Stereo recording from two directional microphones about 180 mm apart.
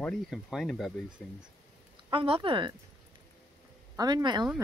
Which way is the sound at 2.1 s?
30° right (ahead or behind).